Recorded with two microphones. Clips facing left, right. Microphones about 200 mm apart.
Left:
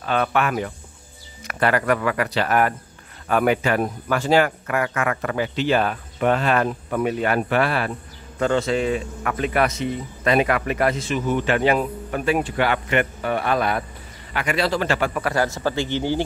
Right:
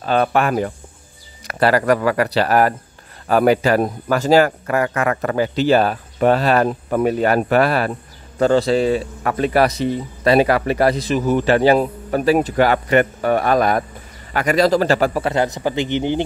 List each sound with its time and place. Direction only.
0.0 s speech: 35° right (ahead or behind)
15.2 s speech: 20° right (ahead or behind)